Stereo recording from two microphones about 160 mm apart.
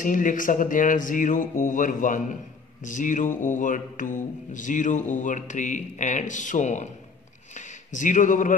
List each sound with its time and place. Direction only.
0.0 s speech: 55° left (ahead or behind)
2.8 s mantra: 50° left (ahead or behind)
7.5 s speech: 50° left (ahead or behind)